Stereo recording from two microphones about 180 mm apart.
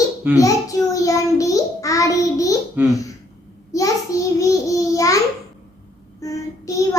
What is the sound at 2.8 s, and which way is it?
Speech, 10° right (ahead or behind).